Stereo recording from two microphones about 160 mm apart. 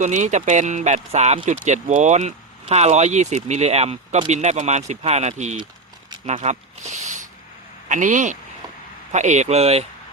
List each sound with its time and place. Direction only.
0.0 s speech: 50° right (ahead or behind)